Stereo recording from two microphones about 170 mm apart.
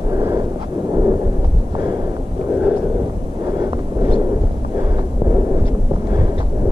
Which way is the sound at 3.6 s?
20° right (ahead or behind).